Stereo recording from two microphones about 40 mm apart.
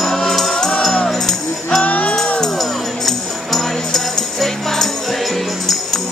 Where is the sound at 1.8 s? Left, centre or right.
Left.